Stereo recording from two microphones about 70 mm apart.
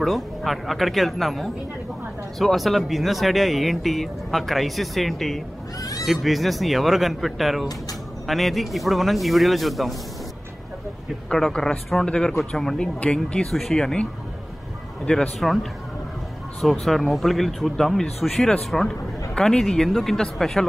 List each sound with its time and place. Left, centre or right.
0.0 s speech: centre
5.8 s a sound: left
6.0 s speech: centre
11.2 s speech: centre
15.1 s speech: centre
16.7 s speech: centre